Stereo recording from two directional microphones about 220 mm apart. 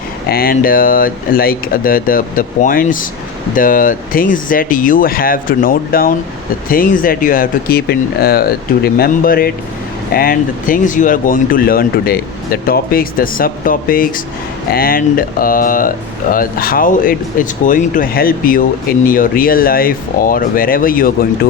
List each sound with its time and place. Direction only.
0.3 s speech: 40° left (ahead or behind)